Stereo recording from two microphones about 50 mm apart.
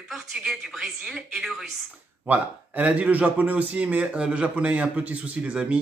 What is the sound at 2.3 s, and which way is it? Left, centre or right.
A man's voice, right.